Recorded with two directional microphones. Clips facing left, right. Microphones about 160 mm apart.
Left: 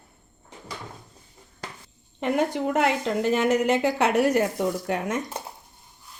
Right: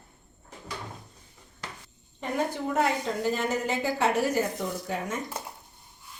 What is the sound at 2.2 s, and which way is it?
A woman's voice, 80° left.